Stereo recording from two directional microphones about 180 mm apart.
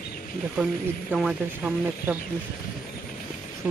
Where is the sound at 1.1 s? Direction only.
5° right (ahead or behind).